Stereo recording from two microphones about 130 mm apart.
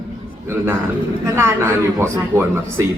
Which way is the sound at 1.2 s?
20° right (ahead or behind).